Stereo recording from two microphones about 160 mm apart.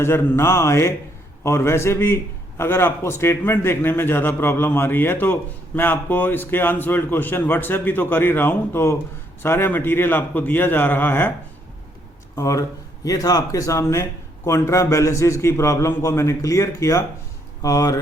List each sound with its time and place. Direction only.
0.0 s a man's voice: 15° left (ahead or behind)
12.4 s a man's voice: 20° left (ahead or behind)